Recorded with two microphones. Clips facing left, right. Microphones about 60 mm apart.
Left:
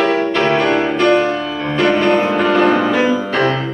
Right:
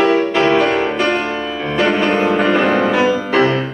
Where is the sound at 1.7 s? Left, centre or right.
Centre.